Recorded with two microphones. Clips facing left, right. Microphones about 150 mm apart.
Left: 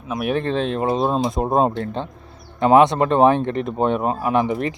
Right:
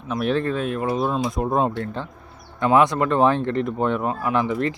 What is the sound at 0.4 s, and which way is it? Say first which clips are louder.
Speech: left 3 dB; 25° left (ahead or behind).